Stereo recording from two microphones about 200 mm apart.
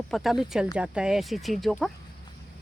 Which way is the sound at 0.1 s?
Centre (ahead or behind).